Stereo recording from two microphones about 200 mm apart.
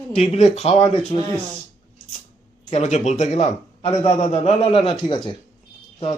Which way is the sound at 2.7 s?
35° left (ahead or behind).